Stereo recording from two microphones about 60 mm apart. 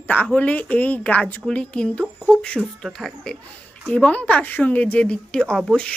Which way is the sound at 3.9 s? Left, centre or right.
Left.